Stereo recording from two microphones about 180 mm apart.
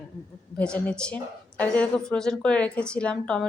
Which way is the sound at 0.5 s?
5° left (ahead or behind).